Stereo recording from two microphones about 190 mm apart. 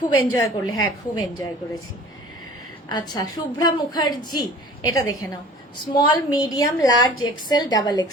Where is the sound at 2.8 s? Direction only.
20° left (ahead or behind).